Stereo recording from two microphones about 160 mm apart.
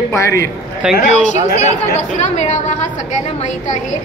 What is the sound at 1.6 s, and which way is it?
A woman's voice, 45° left (ahead or behind).